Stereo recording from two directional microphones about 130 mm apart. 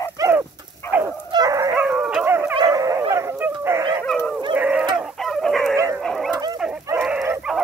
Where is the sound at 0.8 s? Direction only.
20° left (ahead or behind).